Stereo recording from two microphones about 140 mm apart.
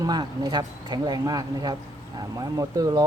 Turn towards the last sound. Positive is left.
turn(degrees=-25)  # may be behind; listen again after turning